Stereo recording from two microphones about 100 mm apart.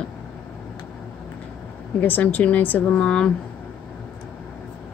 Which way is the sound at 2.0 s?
15° left (ahead or behind).